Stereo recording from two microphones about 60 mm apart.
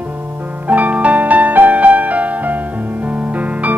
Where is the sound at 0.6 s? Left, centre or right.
Right.